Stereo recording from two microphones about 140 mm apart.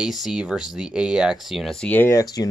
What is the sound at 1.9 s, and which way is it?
Speech, 20° left (ahead or behind).